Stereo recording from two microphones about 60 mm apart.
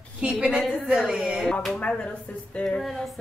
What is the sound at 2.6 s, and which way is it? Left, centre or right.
Speech, centre.